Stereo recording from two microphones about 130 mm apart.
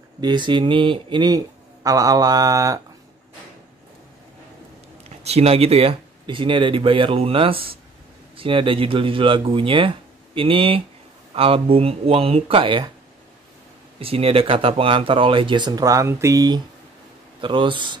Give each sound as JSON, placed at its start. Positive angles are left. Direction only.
{"t": 0.2, "sound": "speech", "side_deg": -35}
{"t": 5.2, "sound": "speech", "side_deg": -50}
{"t": 13.9, "sound": "speech", "side_deg": -45}
{"t": 17.4, "sound": "speech", "side_deg": -40}